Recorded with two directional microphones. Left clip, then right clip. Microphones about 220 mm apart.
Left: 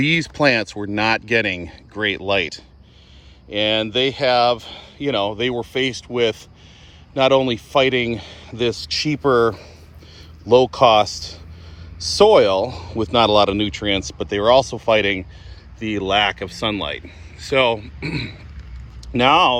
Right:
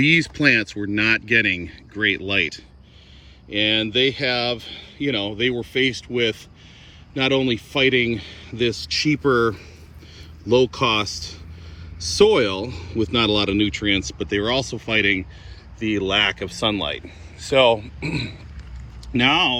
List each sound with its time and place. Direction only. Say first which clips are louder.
0.0 s speech: even; 10° left (ahead or behind)
12.1 s speech: left 4 dB; 10° left (ahead or behind)
15.8 s speech: left 1 dB; 5° left (ahead or behind)
19.1 s speech: left 4 dB; 20° left (ahead or behind)